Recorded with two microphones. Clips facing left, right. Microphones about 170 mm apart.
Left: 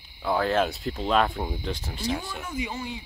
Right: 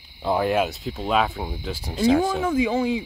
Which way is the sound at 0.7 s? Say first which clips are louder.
Right 1 dB; centre (ahead or behind).